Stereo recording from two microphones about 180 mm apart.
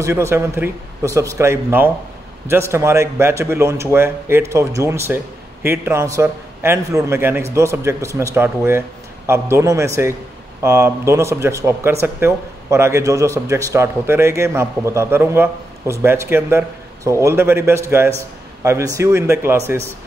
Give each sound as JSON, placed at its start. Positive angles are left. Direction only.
{"t": 0.0, "sound": "speech", "side_deg": -15}